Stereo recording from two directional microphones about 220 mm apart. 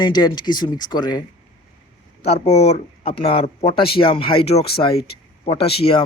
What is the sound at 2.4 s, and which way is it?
Speech, 30° left (ahead or behind).